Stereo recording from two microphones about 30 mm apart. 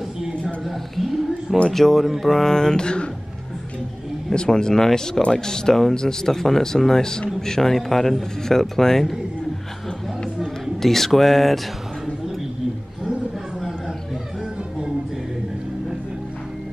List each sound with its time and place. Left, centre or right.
0.7 s speech: centre
2.4 s mantra: centre
4.3 s mantra: left
4.8 s speech: centre
10.8 s speech: centre
13.6 s a sound: centre